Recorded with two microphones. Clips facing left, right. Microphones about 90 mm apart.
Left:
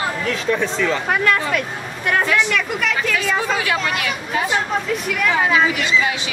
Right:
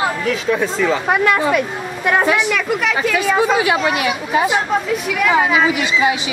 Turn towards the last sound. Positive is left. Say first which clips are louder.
# right 3 dB
turn(degrees=-15)  # may be behind; listen again after turning